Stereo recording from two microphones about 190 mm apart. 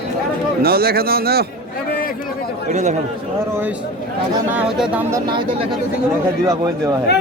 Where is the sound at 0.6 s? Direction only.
55° right (ahead or behind).